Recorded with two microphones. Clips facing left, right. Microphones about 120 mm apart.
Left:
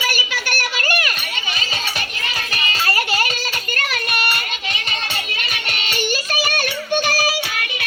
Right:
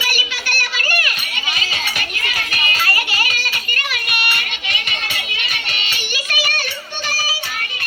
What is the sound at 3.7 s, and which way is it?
Child singing, 35° left (ahead or behind).